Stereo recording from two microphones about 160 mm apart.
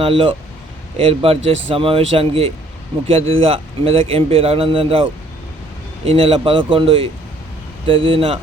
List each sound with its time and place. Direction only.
0.0 s a man's voice: 35° right (ahead or behind)
6.1 s a man's voice: 35° right (ahead or behind)